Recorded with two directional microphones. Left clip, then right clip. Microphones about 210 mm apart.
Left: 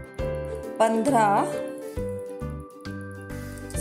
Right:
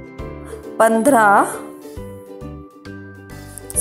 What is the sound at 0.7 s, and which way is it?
Speech, 20° right (ahead or behind).